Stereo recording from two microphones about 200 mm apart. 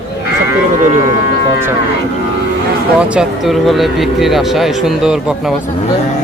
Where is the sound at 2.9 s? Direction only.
5° right (ahead or behind).